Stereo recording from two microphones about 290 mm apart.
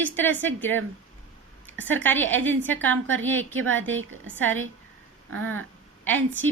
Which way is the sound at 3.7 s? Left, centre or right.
Right.